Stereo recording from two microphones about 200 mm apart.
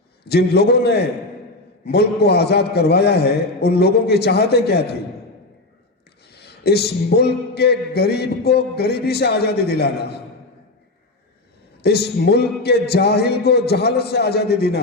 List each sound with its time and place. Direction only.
0.3 s a man's voice: 55° left (ahead or behind)
6.3 s a man's voice: 55° left (ahead or behind)
11.8 s a man's voice: 55° left (ahead or behind)